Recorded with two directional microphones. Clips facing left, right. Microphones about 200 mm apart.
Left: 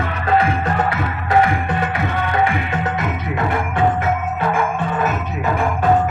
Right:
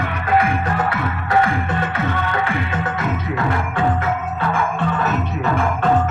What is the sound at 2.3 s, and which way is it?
Music, 20° left (ahead or behind).